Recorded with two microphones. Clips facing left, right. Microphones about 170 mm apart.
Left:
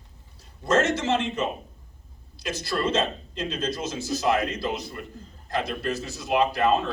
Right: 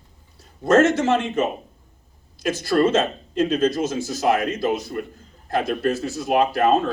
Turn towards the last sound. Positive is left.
turn(degrees=-50)  # may be behind; listen again after turning